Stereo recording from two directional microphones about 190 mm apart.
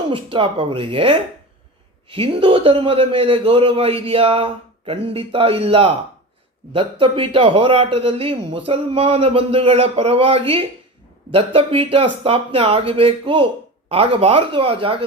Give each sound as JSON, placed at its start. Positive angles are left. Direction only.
{"t": 0.1, "sound": "a man's voice", "side_deg": -30}